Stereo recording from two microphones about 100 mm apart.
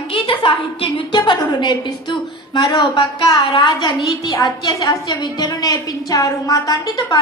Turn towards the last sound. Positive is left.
turn(degrees=35)  # may be behind; listen again after turning